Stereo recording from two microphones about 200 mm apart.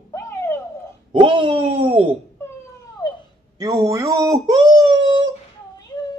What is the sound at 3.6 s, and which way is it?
Speech, 20° right (ahead or behind).